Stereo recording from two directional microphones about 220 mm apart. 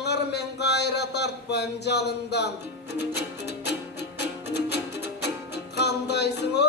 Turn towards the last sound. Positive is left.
turn(degrees=50)  # may be behind; listen again after turning